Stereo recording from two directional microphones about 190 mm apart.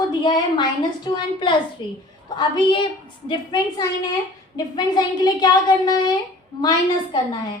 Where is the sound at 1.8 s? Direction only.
25° left (ahead or behind).